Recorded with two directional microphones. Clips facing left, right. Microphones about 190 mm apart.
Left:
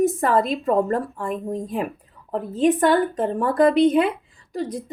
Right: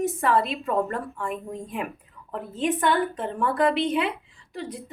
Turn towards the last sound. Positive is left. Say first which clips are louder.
# left 7 dB
turn(degrees=40)  # may be behind; listen again after turning